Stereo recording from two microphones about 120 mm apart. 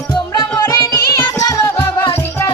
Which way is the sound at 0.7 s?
30° left (ahead or behind).